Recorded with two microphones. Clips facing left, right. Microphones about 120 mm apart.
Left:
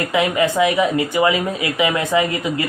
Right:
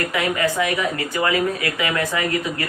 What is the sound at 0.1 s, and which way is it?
Speech, 20° left (ahead or behind).